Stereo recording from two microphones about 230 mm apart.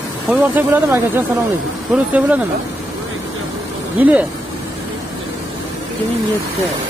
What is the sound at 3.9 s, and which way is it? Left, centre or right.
Speech, centre.